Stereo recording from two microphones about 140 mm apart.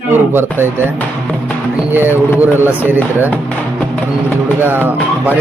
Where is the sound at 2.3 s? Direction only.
15° right (ahead or behind).